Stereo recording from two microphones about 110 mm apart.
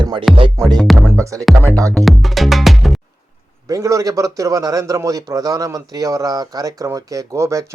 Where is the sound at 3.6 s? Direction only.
30° right (ahead or behind).